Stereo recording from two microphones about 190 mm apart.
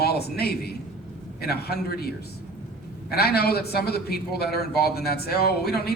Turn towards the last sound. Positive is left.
turn(degrees=55)  # may be behind; listen again after turning